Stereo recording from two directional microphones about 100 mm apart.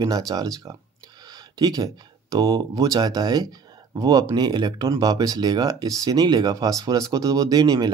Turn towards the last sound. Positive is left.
turn(degrees=-40)  # may be behind; listen again after turning